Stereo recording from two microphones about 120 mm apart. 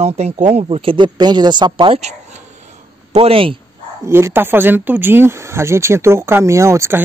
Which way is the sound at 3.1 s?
50° right (ahead or behind).